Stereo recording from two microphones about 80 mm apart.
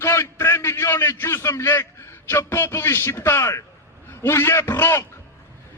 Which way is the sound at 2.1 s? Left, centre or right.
Left.